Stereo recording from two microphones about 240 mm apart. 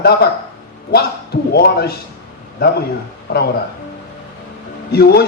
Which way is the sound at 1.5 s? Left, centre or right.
Left.